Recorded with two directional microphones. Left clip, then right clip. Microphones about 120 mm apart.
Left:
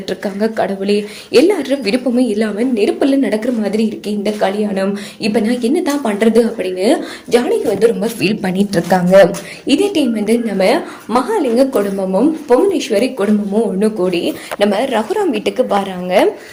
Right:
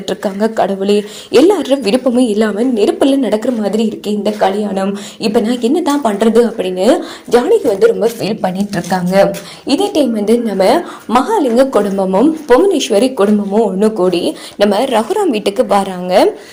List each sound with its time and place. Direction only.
0.1 s a woman's voice: 25° right (ahead or behind)
8.7 s speech: centre (ahead or behind)
9.6 s a woman's voice: 25° right (ahead or behind)
11.9 s speech: 50° right (ahead or behind)
13.6 s a woman's voice: 30° right (ahead or behind)